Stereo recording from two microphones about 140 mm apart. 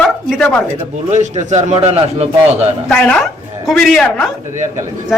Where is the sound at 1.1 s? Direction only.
55° right (ahead or behind).